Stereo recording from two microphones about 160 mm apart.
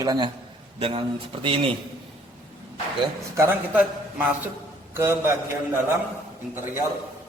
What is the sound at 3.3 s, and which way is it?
A man's voice, 15° right (ahead or behind).